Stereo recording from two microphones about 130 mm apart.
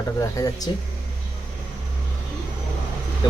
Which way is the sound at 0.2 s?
30° left (ahead or behind).